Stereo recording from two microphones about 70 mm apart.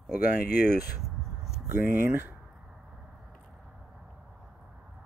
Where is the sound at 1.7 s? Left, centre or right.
Right.